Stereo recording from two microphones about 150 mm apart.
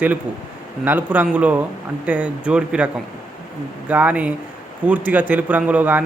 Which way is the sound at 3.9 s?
10° right (ahead or behind).